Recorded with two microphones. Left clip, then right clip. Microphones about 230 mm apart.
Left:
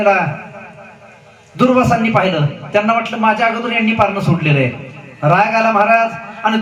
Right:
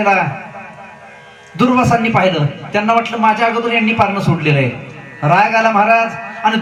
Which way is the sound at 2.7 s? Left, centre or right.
Right.